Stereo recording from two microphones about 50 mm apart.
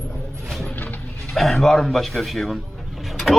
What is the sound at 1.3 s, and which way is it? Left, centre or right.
A man's voice, centre.